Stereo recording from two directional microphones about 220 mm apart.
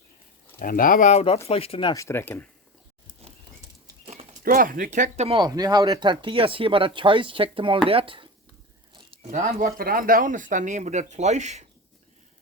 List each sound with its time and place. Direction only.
0.6 s speech: 40° left (ahead or behind); by 2.5 s 10° left (ahead or behind)
4.0 s clip-clop: 30° right (ahead or behind)
4.4 s speech: 40° right (ahead or behind); by 8.3 s 25° right (ahead or behind)
8.9 s a sound: 25° right (ahead or behind)
9.4 s speech: 35° right (ahead or behind)